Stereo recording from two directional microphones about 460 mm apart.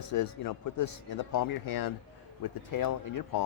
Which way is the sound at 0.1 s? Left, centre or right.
Left.